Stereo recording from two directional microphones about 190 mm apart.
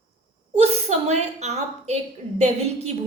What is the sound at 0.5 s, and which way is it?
A woman's voice, 35° right (ahead or behind).